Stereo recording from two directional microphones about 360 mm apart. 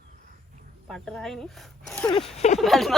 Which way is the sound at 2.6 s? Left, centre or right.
Centre.